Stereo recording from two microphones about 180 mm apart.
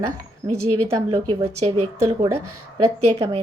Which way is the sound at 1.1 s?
20° right (ahead or behind).